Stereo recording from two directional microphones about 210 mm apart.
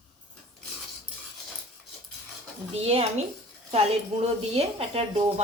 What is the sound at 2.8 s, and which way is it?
Speech, 30° right (ahead or behind).